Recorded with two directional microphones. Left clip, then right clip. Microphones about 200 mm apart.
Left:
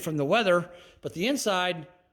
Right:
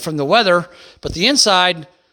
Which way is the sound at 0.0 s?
40° right (ahead or behind).